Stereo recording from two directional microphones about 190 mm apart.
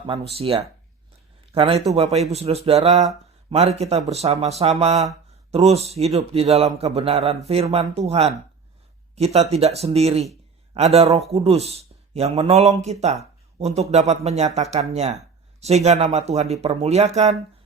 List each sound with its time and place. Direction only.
0.1 s a man's voice: 30° right (ahead or behind)